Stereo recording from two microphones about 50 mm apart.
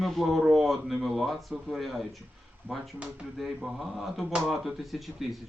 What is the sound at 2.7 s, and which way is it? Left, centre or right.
Speech, right.